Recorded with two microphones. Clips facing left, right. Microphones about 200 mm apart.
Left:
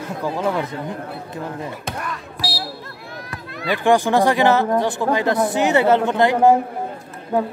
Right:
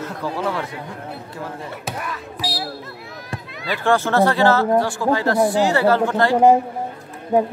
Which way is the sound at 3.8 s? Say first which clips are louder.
Left 1 dB; 15° left (ahead or behind).